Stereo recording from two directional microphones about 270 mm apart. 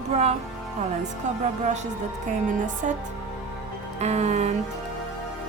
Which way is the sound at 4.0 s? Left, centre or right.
Right.